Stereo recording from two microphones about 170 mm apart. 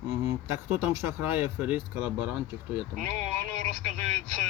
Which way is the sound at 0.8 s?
15° right (ahead or behind).